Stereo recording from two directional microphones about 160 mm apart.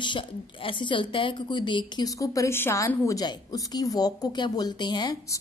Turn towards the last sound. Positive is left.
turn(degrees=25)  # may be behind; listen again after turning